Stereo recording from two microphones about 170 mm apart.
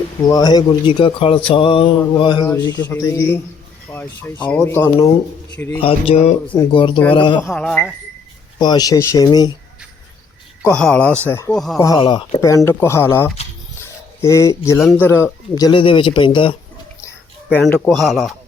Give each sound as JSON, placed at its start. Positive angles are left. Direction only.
{"t": 0.3, "sound": "speech", "side_deg": 25}
{"t": 2.9, "sound": "speech", "side_deg": 15}
{"t": 5.8, "sound": "speech", "side_deg": 35}
{"t": 7.5, "sound": "speech", "side_deg": 5}
{"t": 8.5, "sound": "speech", "side_deg": 25}
{"t": 10.6, "sound": "speech", "side_deg": 5}
{"t": 11.5, "sound": "speech", "side_deg": 0}
{"t": 11.8, "sound": "speech", "side_deg": 20}
{"t": 13.8, "sound": "a sound", "side_deg": 15}
{"t": 14.8, "sound": "speech", "side_deg": 0}
{"t": 15.0, "sound": "speech", "side_deg": 15}
{"t": 17.5, "sound": "speech", "side_deg": 10}